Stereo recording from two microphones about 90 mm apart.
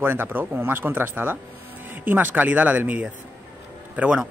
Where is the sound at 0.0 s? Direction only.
25° right (ahead or behind).